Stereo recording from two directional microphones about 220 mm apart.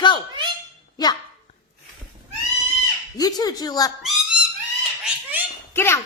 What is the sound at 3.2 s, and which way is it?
Speech, 15° left (ahead or behind).